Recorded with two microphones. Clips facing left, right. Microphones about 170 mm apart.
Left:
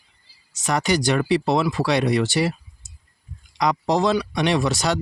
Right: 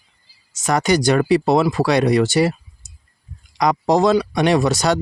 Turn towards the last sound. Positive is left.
turn(degrees=-45)  # may be behind; listen again after turning